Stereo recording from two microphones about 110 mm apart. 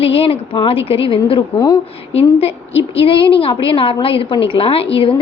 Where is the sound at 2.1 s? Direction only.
65° left (ahead or behind).